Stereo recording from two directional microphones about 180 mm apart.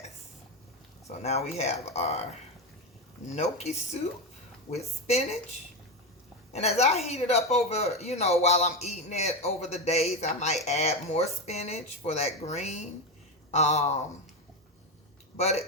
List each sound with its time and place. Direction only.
1.2 s a man's voice: 35° left (ahead or behind)
3.3 s a man's voice: 35° left (ahead or behind)
4.7 s a man's voice: 35° left (ahead or behind)
6.5 s a man's voice: 35° left (ahead or behind)
15.4 s a man's voice: 35° left (ahead or behind)